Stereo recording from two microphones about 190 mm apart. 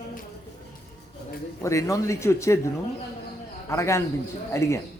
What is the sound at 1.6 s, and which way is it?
A man's voice, 15° left (ahead or behind).